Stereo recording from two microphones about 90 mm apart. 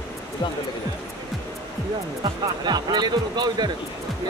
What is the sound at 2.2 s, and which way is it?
Speech, 55° right (ahead or behind).